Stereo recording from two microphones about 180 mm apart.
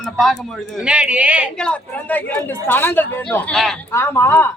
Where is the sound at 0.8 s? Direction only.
5° right (ahead or behind).